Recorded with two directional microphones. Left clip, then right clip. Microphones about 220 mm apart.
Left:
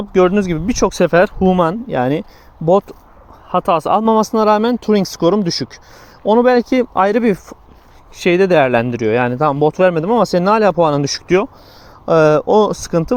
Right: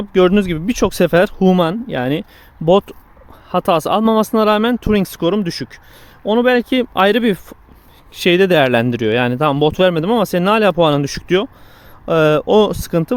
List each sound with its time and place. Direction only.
0.3 s speech: 10° right (ahead or behind)
1.9 s speech: centre (ahead or behind)
3.5 s speech: 15° right (ahead or behind)
4.0 s speech: 25° right (ahead or behind)
4.5 s speech: 5° right (ahead or behind); by 10.6 s 20° right (ahead or behind)
10.8 s speech: 5° right (ahead or behind)
12.2 s speech: 25° right (ahead or behind)
12.5 s speech: 5° right (ahead or behind)